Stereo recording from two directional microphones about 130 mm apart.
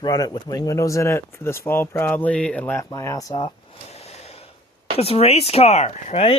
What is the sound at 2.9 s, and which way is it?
Speech, 25° left (ahead or behind).